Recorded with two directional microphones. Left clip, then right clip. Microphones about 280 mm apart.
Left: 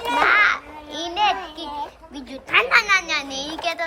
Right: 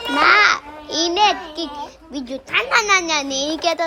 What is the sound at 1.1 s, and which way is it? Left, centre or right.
Child singing, centre.